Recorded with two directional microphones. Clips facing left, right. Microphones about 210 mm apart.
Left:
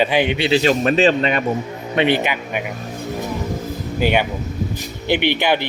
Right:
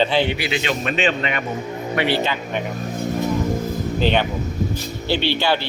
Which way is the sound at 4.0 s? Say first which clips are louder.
Left 2 dB; 10° left (ahead or behind).